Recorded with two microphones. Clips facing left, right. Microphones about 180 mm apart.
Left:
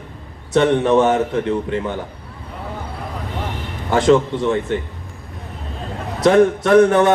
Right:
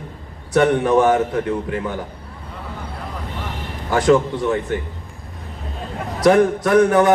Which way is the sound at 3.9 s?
25° left (ahead or behind).